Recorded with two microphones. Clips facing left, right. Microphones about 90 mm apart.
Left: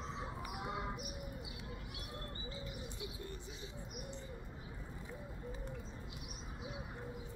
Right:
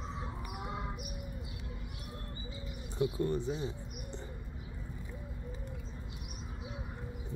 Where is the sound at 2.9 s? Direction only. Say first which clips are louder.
Right 15 dB; 40° right (ahead or behind).